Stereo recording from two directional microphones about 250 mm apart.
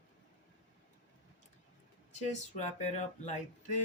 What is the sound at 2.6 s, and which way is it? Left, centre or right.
Speech, left.